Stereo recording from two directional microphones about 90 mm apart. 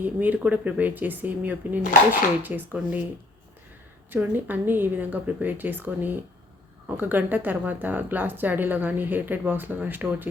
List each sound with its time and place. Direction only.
0.0 s a woman's voice: 20° right (ahead or behind)
4.1 s a woman's voice: 20° right (ahead or behind)